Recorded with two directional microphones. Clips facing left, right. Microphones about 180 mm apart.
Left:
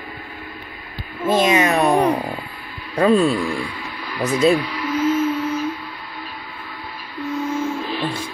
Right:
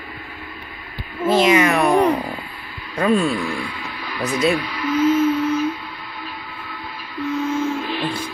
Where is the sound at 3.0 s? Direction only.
30° left (ahead or behind).